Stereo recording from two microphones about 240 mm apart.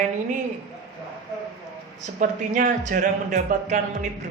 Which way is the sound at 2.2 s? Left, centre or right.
Right.